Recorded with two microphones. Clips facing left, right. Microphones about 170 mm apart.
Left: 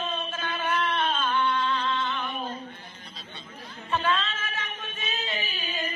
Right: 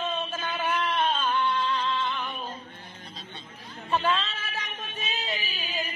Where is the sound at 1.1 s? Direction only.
40° right (ahead or behind).